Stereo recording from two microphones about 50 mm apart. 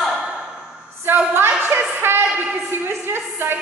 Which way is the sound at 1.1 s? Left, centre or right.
Right.